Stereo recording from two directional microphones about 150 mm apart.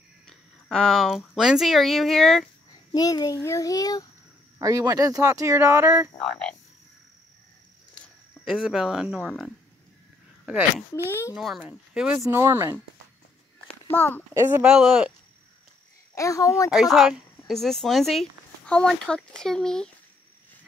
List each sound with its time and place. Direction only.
0.3 s speech: 5° left (ahead or behind)
2.9 s a child's voice: 25° left (ahead or behind)
4.6 s speech: 20° right (ahead or behind)
6.2 s speech: 5° left (ahead or behind)
8.0 s speech: centre (ahead or behind)
11.1 s speech: 15° left (ahead or behind)
11.3 s speech: centre (ahead or behind); by 12.7 s 20° right (ahead or behind)
13.8 s a child's voice: 15° left (ahead or behind)
14.3 s speech: 15° right (ahead or behind)
16.2 s a child's voice: 20° left (ahead or behind)
16.7 s speech: centre (ahead or behind)